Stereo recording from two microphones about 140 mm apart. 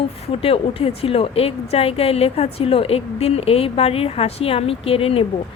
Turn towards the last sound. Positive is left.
turn(degrees=40)  # may be behind; listen again after turning